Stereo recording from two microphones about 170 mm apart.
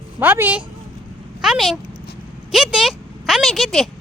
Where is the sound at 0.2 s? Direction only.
10° right (ahead or behind).